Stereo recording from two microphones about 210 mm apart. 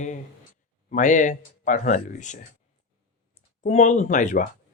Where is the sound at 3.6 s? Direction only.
35° left (ahead or behind).